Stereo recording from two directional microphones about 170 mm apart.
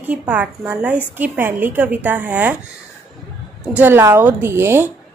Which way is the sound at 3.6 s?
10° right (ahead or behind).